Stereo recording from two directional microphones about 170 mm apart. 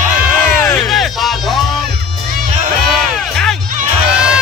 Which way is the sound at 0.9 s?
Centre (ahead or behind).